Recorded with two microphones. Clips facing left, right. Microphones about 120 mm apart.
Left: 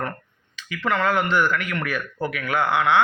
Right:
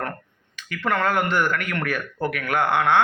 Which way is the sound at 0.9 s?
50° right (ahead or behind).